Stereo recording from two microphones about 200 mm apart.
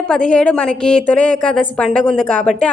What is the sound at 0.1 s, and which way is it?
A woman's voice, 5° left (ahead or behind).